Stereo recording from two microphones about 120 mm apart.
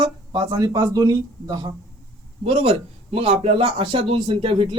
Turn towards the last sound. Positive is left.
turn(degrees=-45)  # may be behind; listen again after turning